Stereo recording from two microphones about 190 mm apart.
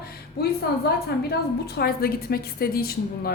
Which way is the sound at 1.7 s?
55° left (ahead or behind).